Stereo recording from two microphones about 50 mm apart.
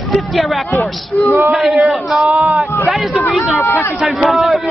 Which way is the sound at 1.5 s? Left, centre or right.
Centre.